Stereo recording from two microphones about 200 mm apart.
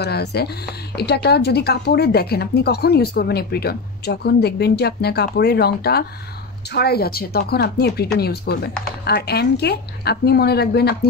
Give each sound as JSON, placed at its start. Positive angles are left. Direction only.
{"t": 0.0, "sound": "speech", "side_deg": 55}